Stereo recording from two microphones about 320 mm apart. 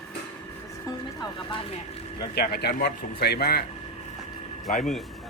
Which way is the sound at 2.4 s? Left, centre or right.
Left.